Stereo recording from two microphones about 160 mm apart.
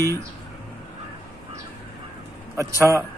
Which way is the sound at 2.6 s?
20° right (ahead or behind).